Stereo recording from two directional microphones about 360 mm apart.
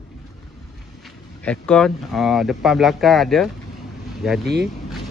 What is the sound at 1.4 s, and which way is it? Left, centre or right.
Speech, centre.